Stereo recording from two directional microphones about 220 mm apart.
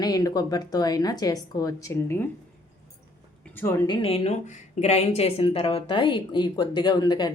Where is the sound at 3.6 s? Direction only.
10° left (ahead or behind).